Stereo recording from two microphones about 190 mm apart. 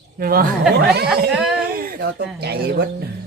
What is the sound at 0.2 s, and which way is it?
Speech, 50° right (ahead or behind).